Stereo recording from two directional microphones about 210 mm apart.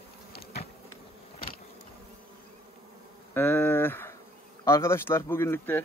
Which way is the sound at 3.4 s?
10° left (ahead or behind).